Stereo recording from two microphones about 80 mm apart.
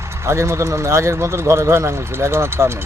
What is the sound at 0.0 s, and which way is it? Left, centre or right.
Speech, right.